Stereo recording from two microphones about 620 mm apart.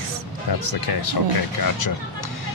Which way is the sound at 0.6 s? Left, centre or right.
Left.